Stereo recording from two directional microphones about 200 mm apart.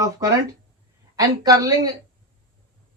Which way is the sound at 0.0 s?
15° right (ahead or behind).